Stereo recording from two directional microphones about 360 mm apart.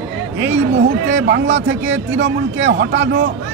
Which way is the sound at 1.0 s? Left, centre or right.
Right.